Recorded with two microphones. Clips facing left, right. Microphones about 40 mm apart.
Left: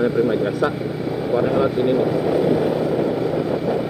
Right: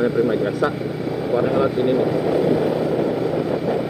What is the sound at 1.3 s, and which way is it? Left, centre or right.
Speech, centre.